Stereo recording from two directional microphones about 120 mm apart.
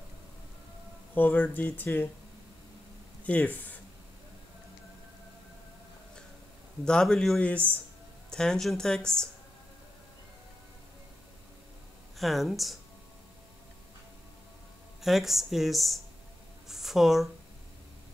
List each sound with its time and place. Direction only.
1.1 s speech: 15° left (ahead or behind)
3.3 s speech: 15° left (ahead or behind)
6.8 s speech: 5° left (ahead or behind)
12.2 s speech: centre (ahead or behind)
15.0 s speech: centre (ahead or behind)
16.6 s a sound: 5° right (ahead or behind)